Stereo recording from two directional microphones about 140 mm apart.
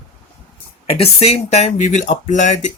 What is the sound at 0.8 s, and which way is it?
Speech, 45° left (ahead or behind).